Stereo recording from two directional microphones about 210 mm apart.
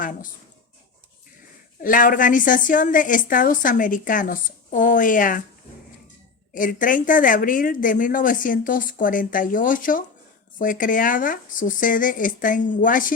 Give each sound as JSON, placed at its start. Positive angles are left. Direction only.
{"t": 0.0, "sound": "a woman's voice", "side_deg": 40}
{"t": 1.8, "sound": "a woman's voice", "side_deg": 40}
{"t": 6.5, "sound": "a woman's voice", "side_deg": 40}